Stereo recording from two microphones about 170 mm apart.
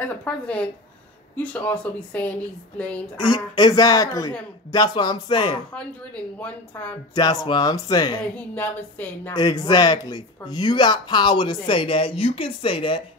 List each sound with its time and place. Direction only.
0.2 s a woman's voice: 5° left (ahead or behind)
3.2 s speech: 25° left (ahead or behind)
6.4 s a woman's voice: 10° left (ahead or behind)
7.2 s speech: 25° left (ahead or behind)
8.2 s a woman's voice: 10° left (ahead or behind)
9.3 s speech: 25° left (ahead or behind)